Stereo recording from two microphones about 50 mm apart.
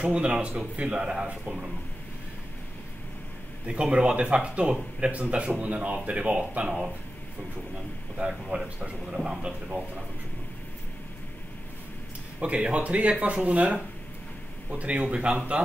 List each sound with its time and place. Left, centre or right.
0.0 s speech: right
3.6 s speech: right
8.3 s speech: centre
8.7 s speech: right
12.4 s speech: right